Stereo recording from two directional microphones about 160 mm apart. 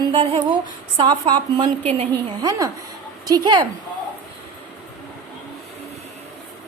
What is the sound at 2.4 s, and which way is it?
A woman's voice, 25° right (ahead or behind).